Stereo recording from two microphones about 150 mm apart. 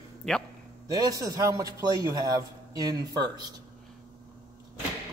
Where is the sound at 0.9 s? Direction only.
25° right (ahead or behind).